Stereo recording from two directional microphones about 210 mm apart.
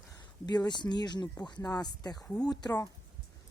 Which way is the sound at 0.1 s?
20° left (ahead or behind).